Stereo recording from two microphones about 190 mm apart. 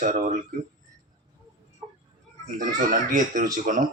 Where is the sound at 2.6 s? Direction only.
40° right (ahead or behind).